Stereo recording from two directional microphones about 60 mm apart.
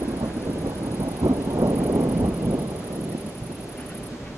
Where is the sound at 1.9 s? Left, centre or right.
Right.